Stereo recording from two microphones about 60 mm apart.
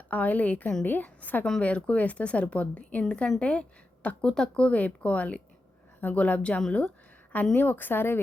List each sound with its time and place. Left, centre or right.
0.1 s speech: left
7.5 s speech: left